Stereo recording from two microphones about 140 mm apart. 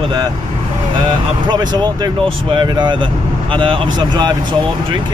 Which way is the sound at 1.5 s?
30° right (ahead or behind).